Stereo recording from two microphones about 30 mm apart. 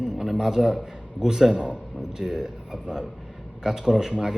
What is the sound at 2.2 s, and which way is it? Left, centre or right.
A man's voice, centre.